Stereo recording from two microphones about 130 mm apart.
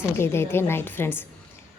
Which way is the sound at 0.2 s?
20° left (ahead or behind).